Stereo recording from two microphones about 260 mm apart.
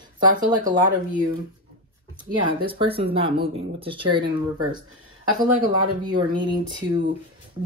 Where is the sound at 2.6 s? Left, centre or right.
Right.